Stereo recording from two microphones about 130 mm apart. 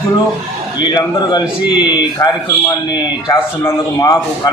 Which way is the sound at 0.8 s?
30° left (ahead or behind).